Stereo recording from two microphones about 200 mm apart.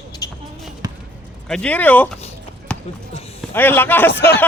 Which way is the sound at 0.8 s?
20° right (ahead or behind).